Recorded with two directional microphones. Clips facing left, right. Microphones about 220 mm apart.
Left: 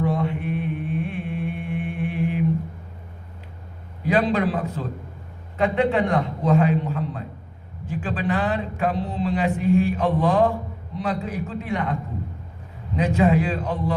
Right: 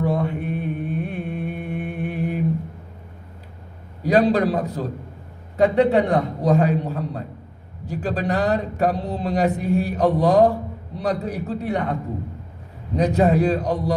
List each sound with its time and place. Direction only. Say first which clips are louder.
0.0 s mantra: right 1 dB; 40° right (ahead or behind)
4.0 s a man's voice: right 4 dB; 40° right (ahead or behind)
13.0 s a man's voice: right 2 dB; 40° right (ahead or behind)